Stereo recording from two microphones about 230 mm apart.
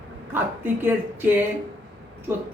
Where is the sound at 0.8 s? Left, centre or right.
Centre.